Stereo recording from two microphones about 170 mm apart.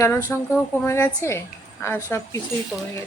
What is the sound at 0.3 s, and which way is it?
A woman's voice, 15° left (ahead or behind).